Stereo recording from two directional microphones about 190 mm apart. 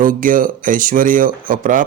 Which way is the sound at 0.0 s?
45° right (ahead or behind).